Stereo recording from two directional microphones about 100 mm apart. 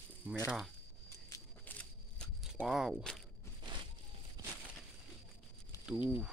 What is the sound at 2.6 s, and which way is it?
Speech, 5° right (ahead or behind).